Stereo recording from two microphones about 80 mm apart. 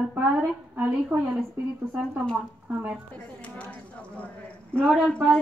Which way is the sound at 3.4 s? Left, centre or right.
Centre.